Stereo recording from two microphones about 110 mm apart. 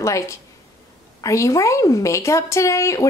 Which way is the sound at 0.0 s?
25° left (ahead or behind).